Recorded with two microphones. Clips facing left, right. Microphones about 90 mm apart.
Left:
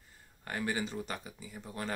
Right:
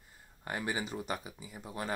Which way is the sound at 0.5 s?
20° right (ahead or behind).